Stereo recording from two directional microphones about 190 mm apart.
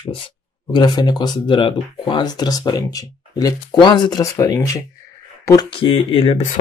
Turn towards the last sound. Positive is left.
turn(degrees=40)  # may be behind; listen again after turning